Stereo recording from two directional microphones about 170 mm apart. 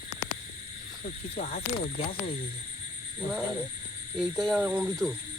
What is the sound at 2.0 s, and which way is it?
Speech, 30° left (ahead or behind).